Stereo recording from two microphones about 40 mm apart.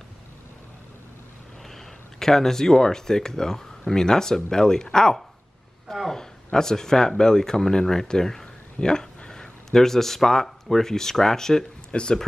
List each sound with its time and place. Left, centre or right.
2.1 s speech: centre
11.9 s speech: left